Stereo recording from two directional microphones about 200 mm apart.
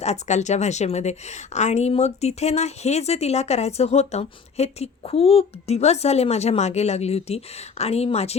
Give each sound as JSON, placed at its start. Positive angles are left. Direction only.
{"t": 0.0, "sound": "a woman's voice", "side_deg": 35}